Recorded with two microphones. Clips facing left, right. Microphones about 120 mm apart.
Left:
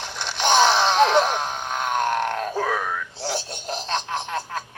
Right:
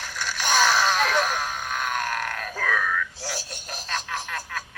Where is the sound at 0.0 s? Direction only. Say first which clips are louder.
Left 5 dB; 25° left (ahead or behind).